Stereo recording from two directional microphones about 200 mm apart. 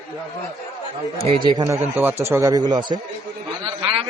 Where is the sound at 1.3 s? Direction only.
25° right (ahead or behind).